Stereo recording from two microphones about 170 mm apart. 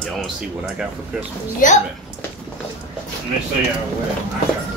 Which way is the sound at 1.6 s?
50° left (ahead or behind).